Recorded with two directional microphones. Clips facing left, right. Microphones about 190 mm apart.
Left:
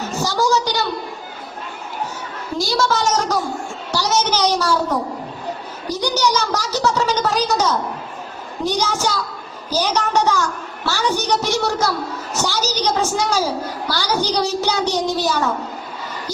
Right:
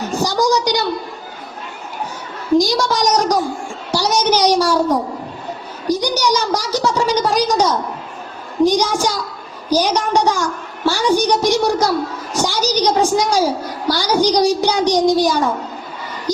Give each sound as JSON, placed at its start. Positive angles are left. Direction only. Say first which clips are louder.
{"t": 0.2, "sound": "a woman's voice", "louder": "right 2 dB", "side_deg": -15}
{"t": 2.6, "sound": "a woman's voice", "louder": "right 2 dB", "side_deg": -15}
{"t": 3.9, "sound": "a sound", "louder": "right 3 dB", "side_deg": -10}
{"t": 8.6, "sound": "a woman's voice", "louder": "right 6 dB", "side_deg": -15}